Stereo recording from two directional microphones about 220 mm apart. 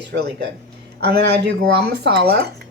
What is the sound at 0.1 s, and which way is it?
Speech, 50° right (ahead or behind).